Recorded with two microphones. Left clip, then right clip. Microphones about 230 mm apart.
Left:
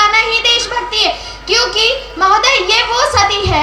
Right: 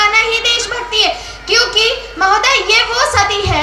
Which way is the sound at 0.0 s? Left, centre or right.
Left.